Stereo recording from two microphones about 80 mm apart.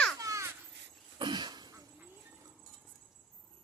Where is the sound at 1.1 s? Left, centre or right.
Right.